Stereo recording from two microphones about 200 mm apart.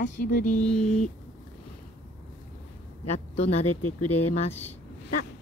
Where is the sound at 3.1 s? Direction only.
30° left (ahead or behind).